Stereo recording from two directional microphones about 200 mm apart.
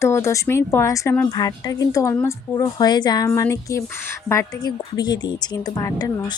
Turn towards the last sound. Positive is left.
turn(degrees=15)  # may be behind; listen again after turning